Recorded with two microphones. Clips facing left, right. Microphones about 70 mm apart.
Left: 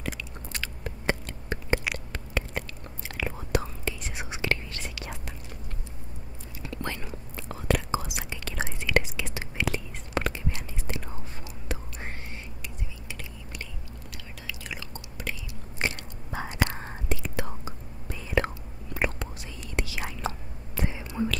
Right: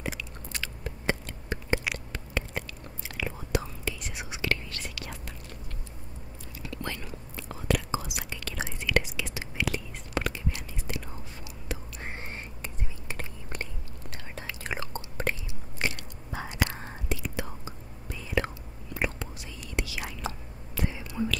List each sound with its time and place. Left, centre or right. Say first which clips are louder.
0.5 s a sound: left 1 dB; left
2.6 s chewing: left 1 dB; left
3.8 s whispering: left 2 dB; left
6.7 s whispering: left 2 dB; left
8.2 s whispering: left 2 dB; left
11.7 s whispering: left 2 dB; left
12.3 s whispering: right 1 dB; right
15.8 s whispering: left 1 dB; left
19.7 s whispering: left 1 dB; left